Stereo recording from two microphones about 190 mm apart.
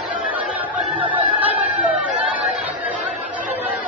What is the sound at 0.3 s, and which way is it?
Chatter, 10° right (ahead or behind).